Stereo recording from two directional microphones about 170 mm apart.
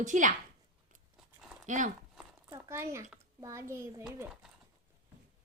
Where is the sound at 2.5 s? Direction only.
15° right (ahead or behind).